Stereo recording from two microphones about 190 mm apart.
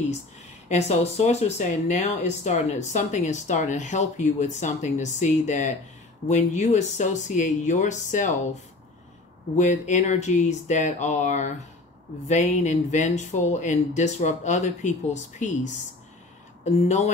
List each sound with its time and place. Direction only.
0.7 s speech: 35° left (ahead or behind)
9.6 s speech: 40° left (ahead or behind)
16.8 s speech: 35° left (ahead or behind)